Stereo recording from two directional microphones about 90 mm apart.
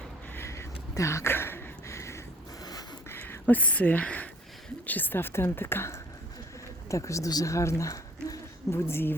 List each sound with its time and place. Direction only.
0.3 s a sound: 30° left (ahead or behind)
4.9 s a woman's voice: 20° left (ahead or behind); by 8.4 s 35° left (ahead or behind)
8.7 s a woman's voice: 25° left (ahead or behind)